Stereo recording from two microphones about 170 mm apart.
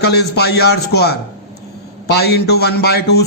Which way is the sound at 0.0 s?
75° left (ahead or behind).